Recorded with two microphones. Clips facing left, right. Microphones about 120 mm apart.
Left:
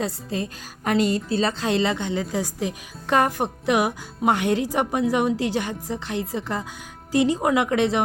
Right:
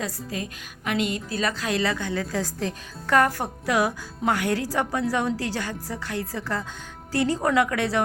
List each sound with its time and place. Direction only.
0.0 s speech: 30° left (ahead or behind)